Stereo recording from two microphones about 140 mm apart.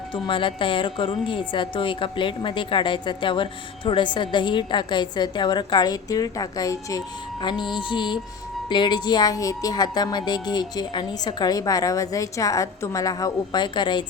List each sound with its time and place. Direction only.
0.1 s a woman's voice: 40° left (ahead or behind)